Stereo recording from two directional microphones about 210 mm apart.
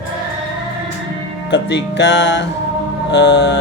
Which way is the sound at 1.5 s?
55° left (ahead or behind).